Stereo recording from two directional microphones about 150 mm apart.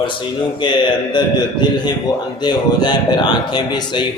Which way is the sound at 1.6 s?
30° left (ahead or behind).